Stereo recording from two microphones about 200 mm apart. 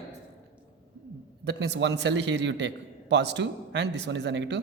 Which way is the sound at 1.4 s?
55° right (ahead or behind).